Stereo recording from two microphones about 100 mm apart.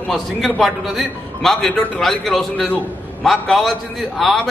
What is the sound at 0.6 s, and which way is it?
A man's voice, centre (ahead or behind).